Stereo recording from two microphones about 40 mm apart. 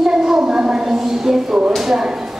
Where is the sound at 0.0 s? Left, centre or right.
Centre.